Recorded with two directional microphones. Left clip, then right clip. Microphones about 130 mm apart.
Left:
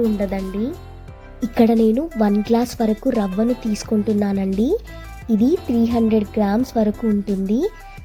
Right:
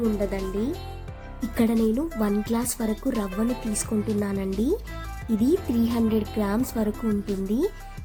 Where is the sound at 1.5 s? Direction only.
35° left (ahead or behind).